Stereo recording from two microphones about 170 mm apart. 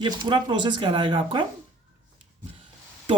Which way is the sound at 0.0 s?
25° right (ahead or behind).